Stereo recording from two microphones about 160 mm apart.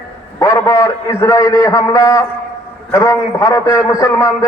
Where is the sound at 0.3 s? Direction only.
20° left (ahead or behind).